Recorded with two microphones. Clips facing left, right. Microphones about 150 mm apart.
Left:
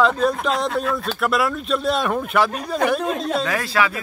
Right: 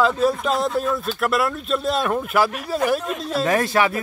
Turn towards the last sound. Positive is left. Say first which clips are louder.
# right 3 dB
turn(degrees=-25)  # may be behind; listen again after turning